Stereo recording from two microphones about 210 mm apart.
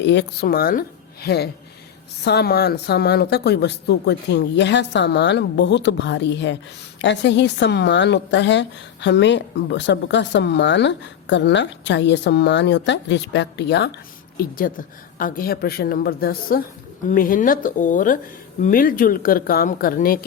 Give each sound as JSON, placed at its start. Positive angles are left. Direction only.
{"t": 0.0, "sound": "a woman's voice", "side_deg": 55}
{"t": 14.3, "sound": "a woman's voice", "side_deg": 40}